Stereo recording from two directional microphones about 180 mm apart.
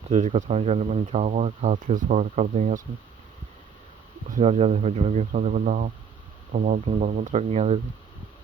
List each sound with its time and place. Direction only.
0.1 s speech: 40° right (ahead or behind)
4.4 s speech: 35° right (ahead or behind)